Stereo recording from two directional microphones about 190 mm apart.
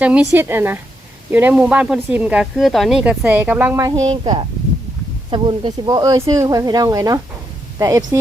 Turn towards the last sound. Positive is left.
turn(degrees=-15)  # may be behind; listen again after turning